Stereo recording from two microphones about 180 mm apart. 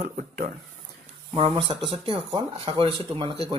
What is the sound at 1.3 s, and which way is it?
Speech, 30° right (ahead or behind).